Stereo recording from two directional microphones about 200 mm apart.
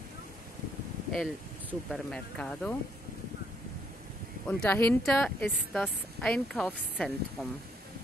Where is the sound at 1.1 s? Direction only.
Centre (ahead or behind).